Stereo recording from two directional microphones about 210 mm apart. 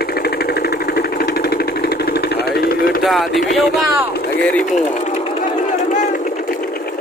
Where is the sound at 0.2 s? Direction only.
50° left (ahead or behind).